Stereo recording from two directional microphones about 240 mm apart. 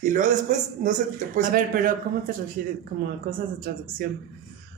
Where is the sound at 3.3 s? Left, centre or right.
Right.